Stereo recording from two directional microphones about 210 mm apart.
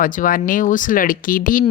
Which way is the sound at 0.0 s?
40° left (ahead or behind).